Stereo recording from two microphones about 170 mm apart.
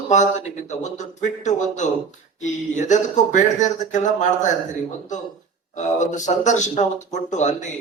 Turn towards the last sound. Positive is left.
turn(degrees=45)  # may be behind; listen again after turning